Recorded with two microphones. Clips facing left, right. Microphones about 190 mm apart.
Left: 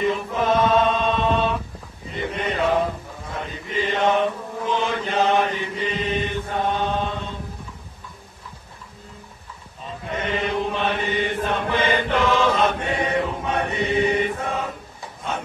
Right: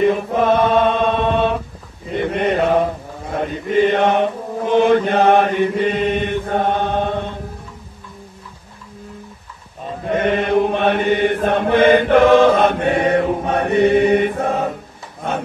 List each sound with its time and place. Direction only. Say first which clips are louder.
0.0 s chant: right 7 dB; 55° right (ahead or behind)
2.1 s mantra: right 8 dB; 60° right (ahead or behind)
10.0 s chant: right 8 dB; 55° right (ahead or behind)